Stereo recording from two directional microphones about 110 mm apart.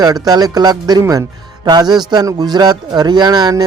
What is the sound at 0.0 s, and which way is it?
Speech, 35° right (ahead or behind).